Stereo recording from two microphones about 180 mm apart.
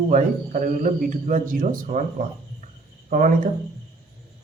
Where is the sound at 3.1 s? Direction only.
50° right (ahead or behind).